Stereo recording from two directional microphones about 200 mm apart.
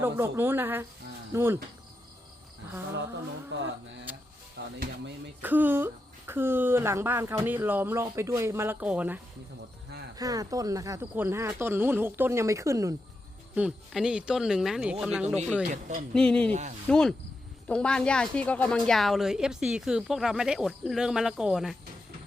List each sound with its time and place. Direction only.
0.0 s speech: 10° right (ahead or behind)
4.1 s music: 10° right (ahead or behind)
4.5 s speech: 55° right (ahead or behind)
5.4 s speech: 10° right (ahead or behind)
13.6 s a woman's voice: 5° right (ahead or behind)
15.7 s speech: 35° right (ahead or behind)
16.1 s a woman's voice: 5° left (ahead or behind)
16.5 s speech: 35° right (ahead or behind)
16.9 s a woman's voice: 5° left (ahead or behind)